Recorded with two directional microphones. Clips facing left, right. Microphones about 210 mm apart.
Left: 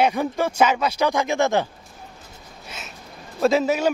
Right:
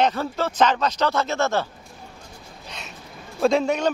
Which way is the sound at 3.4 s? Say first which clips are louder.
Left 1 dB; 5° left (ahead or behind).